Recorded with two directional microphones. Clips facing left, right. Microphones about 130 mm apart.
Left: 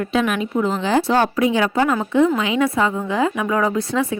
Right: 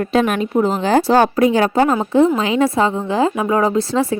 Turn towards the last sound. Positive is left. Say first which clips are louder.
# right 3 dB
turn(degrees=-30)  # may be behind; listen again after turning